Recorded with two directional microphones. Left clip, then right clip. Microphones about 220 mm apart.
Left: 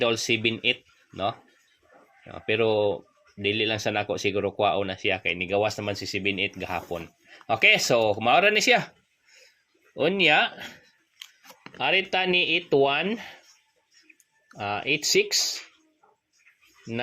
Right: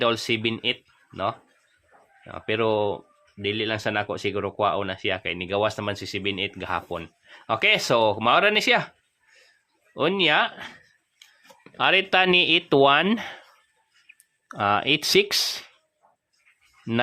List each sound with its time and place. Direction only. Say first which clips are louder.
0.0 s speech: right 1 dB; 15° right (ahead or behind)
9.9 s speech: even; 20° right (ahead or behind)
11.8 s speech: right 4 dB; 30° right (ahead or behind)
14.6 s speech: right 5 dB; 30° right (ahead or behind)